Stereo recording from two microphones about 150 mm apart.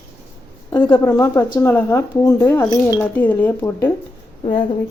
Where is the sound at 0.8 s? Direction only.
15° left (ahead or behind).